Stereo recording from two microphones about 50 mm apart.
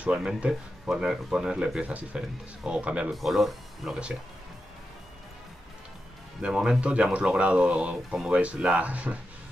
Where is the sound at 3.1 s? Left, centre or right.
Centre.